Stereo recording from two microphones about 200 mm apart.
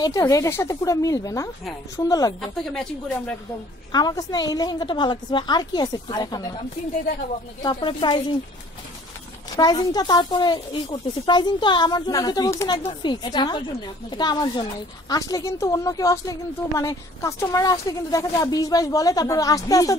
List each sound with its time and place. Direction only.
0.0 s a woman's voice: 20° left (ahead or behind)
2.4 s a woman's voice: centre (ahead or behind)
3.9 s speech: 20° left (ahead or behind)
7.6 s speech: 25° left (ahead or behind)
9.6 s a woman's voice: 20° left (ahead or behind)